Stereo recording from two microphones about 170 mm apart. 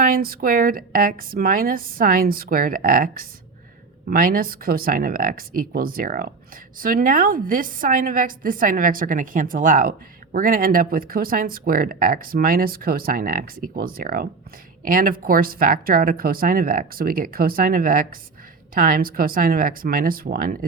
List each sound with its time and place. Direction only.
0.0 s speech: 60° right (ahead or behind)